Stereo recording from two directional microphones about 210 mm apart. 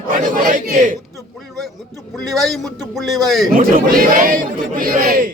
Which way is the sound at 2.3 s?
Centre (ahead or behind).